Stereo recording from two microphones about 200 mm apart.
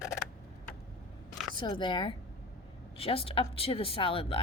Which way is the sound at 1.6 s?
25° left (ahead or behind).